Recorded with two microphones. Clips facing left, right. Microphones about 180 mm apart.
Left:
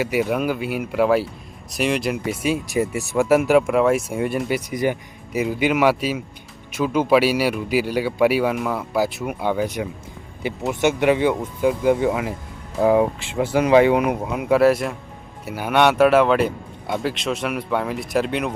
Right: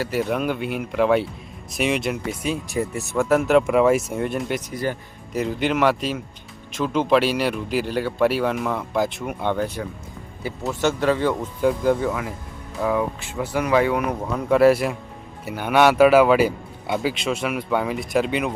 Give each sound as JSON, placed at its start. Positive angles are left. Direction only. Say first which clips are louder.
{"t": 0.2, "sound": "a man's voice", "louder": "even", "side_deg": 5}
{"t": 12.8, "sound": "a man's voice", "louder": "left 6 dB", "side_deg": 30}